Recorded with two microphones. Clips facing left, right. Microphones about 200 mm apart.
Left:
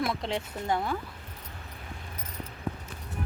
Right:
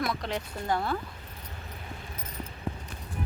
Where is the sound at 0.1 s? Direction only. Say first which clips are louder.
Left 1 dB; 25° left (ahead or behind).